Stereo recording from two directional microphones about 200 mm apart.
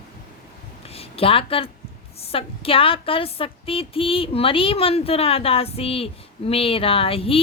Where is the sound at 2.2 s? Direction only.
30° left (ahead or behind).